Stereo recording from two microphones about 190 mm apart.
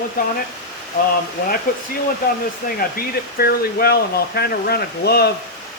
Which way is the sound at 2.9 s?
55° left (ahead or behind).